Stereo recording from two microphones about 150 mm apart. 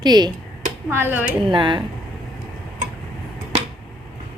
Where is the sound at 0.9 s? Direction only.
15° right (ahead or behind).